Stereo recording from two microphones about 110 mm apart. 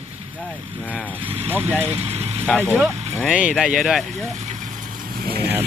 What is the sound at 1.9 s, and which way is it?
Vehicle, 65° right (ahead or behind).